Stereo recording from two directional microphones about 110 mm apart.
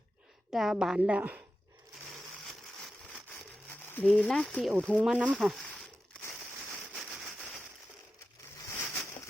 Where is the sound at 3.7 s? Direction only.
15° left (ahead or behind).